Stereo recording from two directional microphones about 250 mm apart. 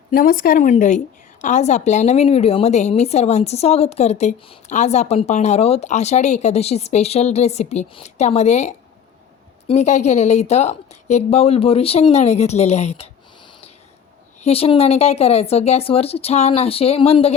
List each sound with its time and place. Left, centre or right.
0.1 s a woman's voice: left
14.4 s a woman's voice: left